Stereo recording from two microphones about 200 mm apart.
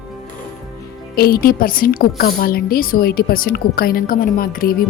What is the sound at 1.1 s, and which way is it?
A woman's voice, 50° left (ahead or behind).